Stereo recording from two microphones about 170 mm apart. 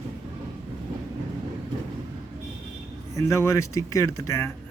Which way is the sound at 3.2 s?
15° left (ahead or behind).